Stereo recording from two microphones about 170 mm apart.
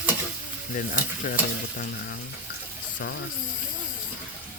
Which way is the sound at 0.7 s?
50° left (ahead or behind).